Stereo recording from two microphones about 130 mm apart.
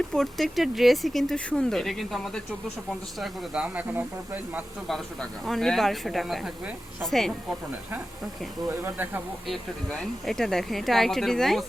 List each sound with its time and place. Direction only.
0.1 s speech: centre (ahead or behind); by 4.6 s 15° right (ahead or behind)
4.9 s speech: 5° left (ahead or behind)
8.6 s speech: 15° right (ahead or behind)
9.5 s speech: 5° left (ahead or behind)